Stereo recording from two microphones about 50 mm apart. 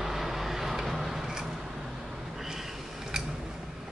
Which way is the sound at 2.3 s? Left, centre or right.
Centre.